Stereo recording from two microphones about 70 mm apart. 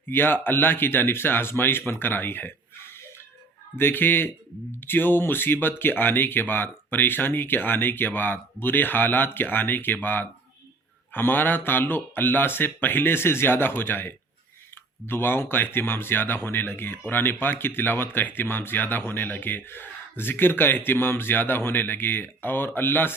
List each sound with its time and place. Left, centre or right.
0.1 s speech: left
3.8 s speech: left